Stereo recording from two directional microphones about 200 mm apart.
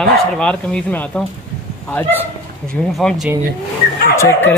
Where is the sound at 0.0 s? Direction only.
5° left (ahead or behind).